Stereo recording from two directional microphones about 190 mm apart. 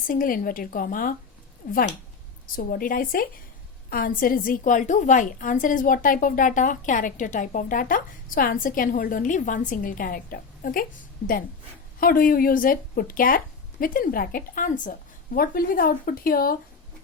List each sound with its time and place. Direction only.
0.1 s a woman's voice: 45° left (ahead or behind)
2.6 s a woman's voice: 45° left (ahead or behind)
11.9 s a woman's voice: 50° left (ahead or behind)